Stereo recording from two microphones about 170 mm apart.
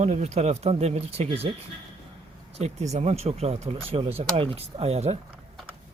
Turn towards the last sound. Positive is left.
turn(degrees=-40)  # may be behind; listen again after turning